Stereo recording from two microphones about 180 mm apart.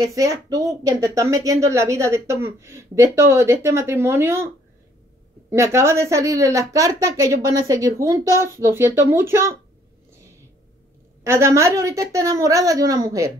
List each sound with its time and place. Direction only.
0.0 s speech: 20° right (ahead or behind)
5.5 s speech: 15° right (ahead or behind)
11.2 s speech: 15° right (ahead or behind)